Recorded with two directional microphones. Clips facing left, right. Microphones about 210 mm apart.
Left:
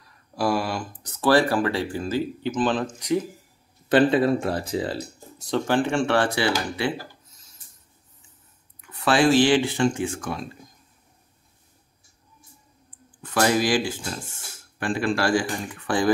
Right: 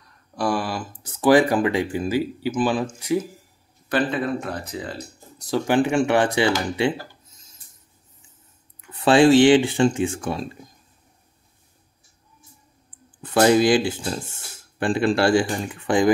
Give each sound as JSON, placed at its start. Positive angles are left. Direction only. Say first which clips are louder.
{"t": 0.0, "sound": "a sound", "louder": "even", "side_deg": 0}
{"t": 1.2, "sound": "speech", "louder": "right 3 dB", "side_deg": -15}
{"t": 3.9, "sound": "speech", "louder": "left 5 dB", "side_deg": 35}
{"t": 5.7, "sound": "speech", "louder": "right 4 dB", "side_deg": -15}
{"t": 9.0, "sound": "speech", "louder": "right 5 dB", "side_deg": -25}
{"t": 13.2, "sound": "speech", "louder": "right 5 dB", "side_deg": -25}